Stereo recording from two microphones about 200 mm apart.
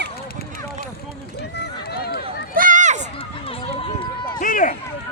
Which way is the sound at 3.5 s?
25° left (ahead or behind).